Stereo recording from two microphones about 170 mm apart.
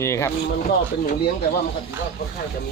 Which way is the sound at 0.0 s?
15° left (ahead or behind).